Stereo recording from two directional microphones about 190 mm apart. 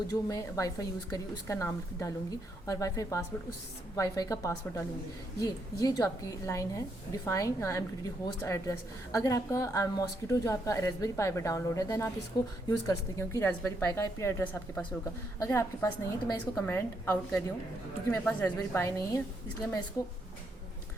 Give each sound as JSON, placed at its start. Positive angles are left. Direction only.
{"t": 0.1, "sound": "a woman's voice", "side_deg": 20}